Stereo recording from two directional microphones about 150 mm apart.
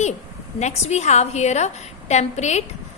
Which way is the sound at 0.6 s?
50° left (ahead or behind).